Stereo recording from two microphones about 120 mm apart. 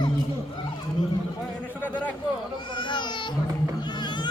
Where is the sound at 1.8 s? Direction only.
15° left (ahead or behind).